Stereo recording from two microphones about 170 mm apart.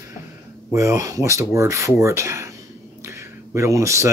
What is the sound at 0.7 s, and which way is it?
Speech, 15° right (ahead or behind).